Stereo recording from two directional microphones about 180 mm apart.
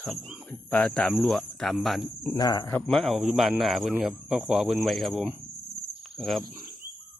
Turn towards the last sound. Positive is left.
turn(degrees=0)  # may be behind; listen again after turning